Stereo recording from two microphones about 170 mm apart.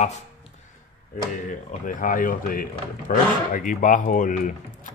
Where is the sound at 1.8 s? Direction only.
55° left (ahead or behind).